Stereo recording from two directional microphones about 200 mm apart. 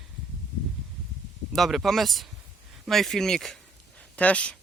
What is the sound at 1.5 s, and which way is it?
Speech, centre (ahead or behind).